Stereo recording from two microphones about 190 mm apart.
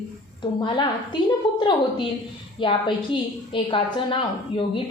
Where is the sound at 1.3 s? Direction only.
25° left (ahead or behind).